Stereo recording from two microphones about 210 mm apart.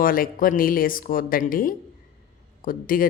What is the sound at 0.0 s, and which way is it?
Speech, 40° left (ahead or behind).